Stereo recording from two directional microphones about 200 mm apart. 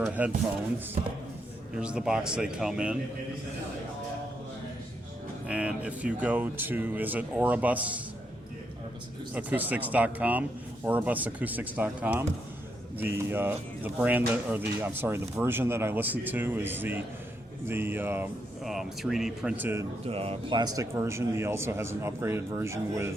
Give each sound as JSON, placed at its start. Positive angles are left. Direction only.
{"t": 0.0, "sound": "a sound", "side_deg": -5}
{"t": 1.7, "sound": "speech", "side_deg": -5}
{"t": 5.5, "sound": "speech", "side_deg": -5}
{"t": 9.3, "sound": "speech", "side_deg": -10}
{"t": 20.1, "sound": "speech", "side_deg": -30}
{"t": 20.7, "sound": "speech", "side_deg": -15}